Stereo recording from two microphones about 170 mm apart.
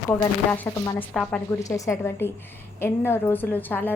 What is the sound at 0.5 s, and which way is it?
Speech, 10° left (ahead or behind).